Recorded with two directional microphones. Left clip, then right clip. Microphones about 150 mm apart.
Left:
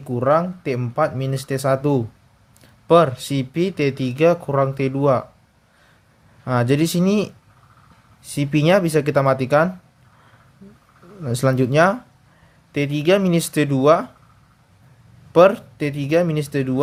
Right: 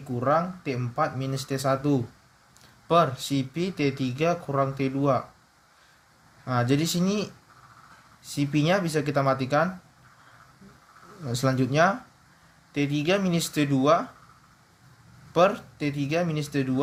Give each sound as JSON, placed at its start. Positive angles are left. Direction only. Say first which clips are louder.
{"t": 0.1, "sound": "speech", "louder": "left 7 dB", "side_deg": 65}
{"t": 6.4, "sound": "speech", "louder": "left 7 dB", "side_deg": 60}
{"t": 8.3, "sound": "speech", "louder": "left 8 dB", "side_deg": 65}
{"t": 11.3, "sound": "speech", "louder": "left 7 dB", "side_deg": 60}
{"t": 15.3, "sound": "speech", "louder": "left 9 dB", "side_deg": 60}